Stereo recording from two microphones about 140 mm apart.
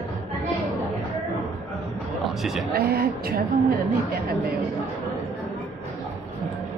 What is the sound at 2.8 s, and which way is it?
Speech, 90° right.